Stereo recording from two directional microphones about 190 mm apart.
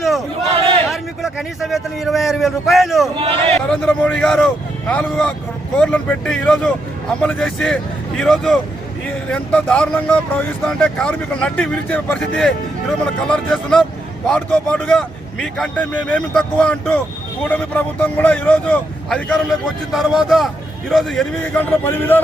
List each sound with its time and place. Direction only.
0.9 s a man's voice: centre (ahead or behind)
3.2 s a sound: 30° right (ahead or behind)
3.7 s a man's voice: 5° left (ahead or behind)